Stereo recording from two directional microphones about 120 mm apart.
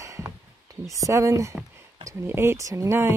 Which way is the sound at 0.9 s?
25° right (ahead or behind).